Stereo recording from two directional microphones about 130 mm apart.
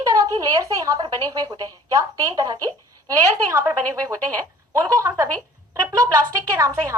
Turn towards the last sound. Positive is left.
turn(degrees=-25)  # may be behind; listen again after turning